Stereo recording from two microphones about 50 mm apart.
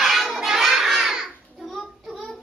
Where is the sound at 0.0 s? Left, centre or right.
Centre.